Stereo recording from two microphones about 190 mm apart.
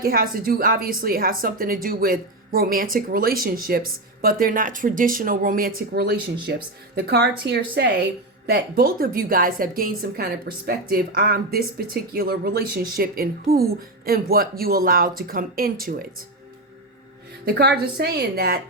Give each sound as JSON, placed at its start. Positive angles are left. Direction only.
{"t": 0.0, "sound": "a woman's voice", "side_deg": -50}
{"t": 17.4, "sound": "a woman's voice", "side_deg": -60}